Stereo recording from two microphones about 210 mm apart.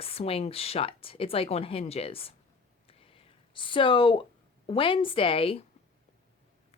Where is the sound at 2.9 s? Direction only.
25° left (ahead or behind).